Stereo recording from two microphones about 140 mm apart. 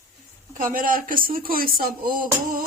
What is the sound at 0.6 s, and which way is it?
Speech, 80° right.